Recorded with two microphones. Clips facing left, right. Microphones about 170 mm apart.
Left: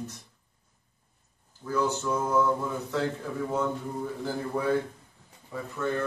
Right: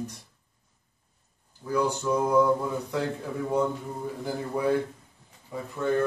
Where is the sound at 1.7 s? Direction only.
15° right (ahead or behind).